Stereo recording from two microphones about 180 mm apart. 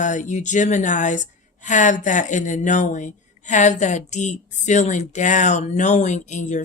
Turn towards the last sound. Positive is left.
turn(degrees=40)  # may be behind; listen again after turning